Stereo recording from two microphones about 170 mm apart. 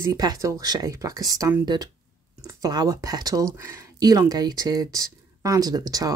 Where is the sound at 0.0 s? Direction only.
20° right (ahead or behind).